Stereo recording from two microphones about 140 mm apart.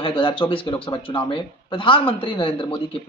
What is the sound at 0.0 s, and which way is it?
Speech, 40° left (ahead or behind).